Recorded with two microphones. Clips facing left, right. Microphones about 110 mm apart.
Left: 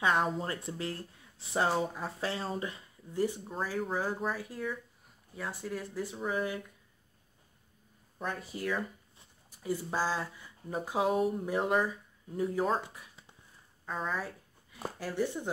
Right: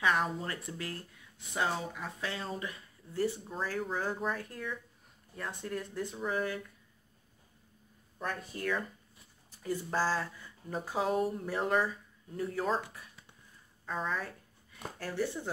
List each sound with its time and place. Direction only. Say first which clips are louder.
0.0 s speech: left 2 dB; 25° left (ahead or behind)
3.1 s speech: left 1 dB; 15° left (ahead or behind)
3.5 s speech: left 2 dB; 5° left (ahead or behind)
8.2 s speech: left 1 dB; 10° left (ahead or behind)
11.4 s speech: left 1 dB; 15° left (ahead or behind)
13.8 s speech: even; 5° left (ahead or behind)